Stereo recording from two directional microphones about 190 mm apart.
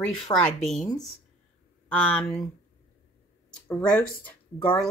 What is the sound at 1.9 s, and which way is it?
Speech, 5° left (ahead or behind).